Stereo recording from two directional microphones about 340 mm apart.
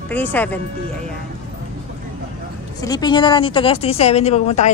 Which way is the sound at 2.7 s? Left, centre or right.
Centre.